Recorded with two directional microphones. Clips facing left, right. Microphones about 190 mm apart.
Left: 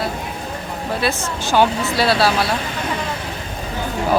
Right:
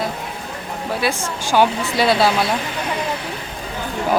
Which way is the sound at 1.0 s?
10° right (ahead or behind).